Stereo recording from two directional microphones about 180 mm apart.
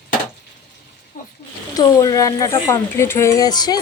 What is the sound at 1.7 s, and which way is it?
Speech, 20° left (ahead or behind).